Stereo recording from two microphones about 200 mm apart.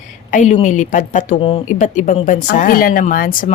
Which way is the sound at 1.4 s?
25° left (ahead or behind).